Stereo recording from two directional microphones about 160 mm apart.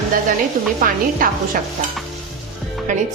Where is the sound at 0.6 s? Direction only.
60° right (ahead or behind).